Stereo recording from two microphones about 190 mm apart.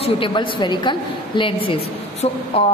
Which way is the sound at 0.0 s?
25° left (ahead or behind).